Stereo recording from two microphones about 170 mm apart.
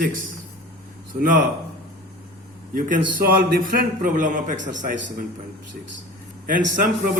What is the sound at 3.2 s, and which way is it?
A man's voice, 55° right (ahead or behind).